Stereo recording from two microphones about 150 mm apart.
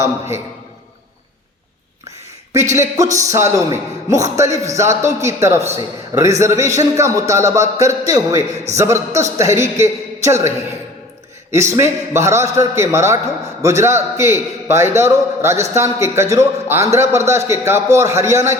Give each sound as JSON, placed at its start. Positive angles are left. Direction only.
{"t": 2.0, "sound": "a sound", "side_deg": -20}
{"t": 2.7, "sound": "a man's voice", "side_deg": -20}
{"t": 11.5, "sound": "a man's voice", "side_deg": -20}